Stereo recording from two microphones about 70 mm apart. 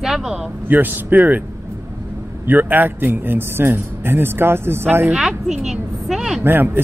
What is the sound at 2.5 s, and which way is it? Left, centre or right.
Speech, right.